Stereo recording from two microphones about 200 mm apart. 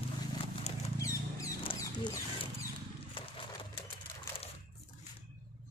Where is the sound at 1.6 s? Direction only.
25° left (ahead or behind).